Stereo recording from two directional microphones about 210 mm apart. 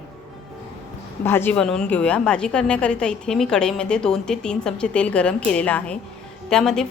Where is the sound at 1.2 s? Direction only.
10° left (ahead or behind).